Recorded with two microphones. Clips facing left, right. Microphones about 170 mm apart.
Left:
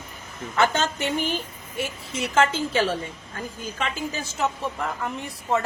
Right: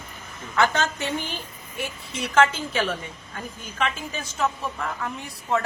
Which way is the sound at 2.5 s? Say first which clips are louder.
Left 3 dB; 30° left (ahead or behind).